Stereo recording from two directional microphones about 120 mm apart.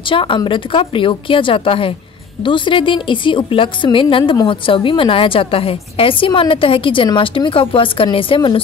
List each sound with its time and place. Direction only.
0.1 s a woman's voice: 45° left (ahead or behind)